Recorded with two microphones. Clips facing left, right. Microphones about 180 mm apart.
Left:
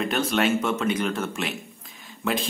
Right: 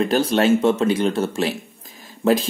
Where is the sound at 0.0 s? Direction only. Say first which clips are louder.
Right 6 dB; 35° right (ahead or behind).